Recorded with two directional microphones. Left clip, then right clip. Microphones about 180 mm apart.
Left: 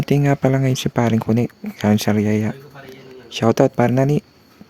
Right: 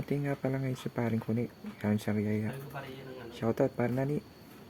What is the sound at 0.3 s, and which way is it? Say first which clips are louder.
Speech: left 16 dB; 70° left (ahead or behind).